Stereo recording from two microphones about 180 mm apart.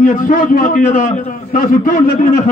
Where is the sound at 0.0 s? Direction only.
50° left (ahead or behind).